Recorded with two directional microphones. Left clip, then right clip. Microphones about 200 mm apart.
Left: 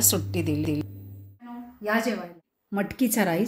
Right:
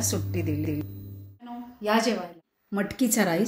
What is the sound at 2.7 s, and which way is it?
Speech, 5° left (ahead or behind).